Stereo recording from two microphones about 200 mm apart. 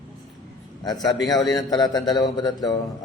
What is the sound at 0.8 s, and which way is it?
Speech, 20° left (ahead or behind).